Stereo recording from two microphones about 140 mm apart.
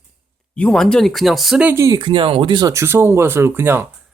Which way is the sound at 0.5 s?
5° left (ahead or behind).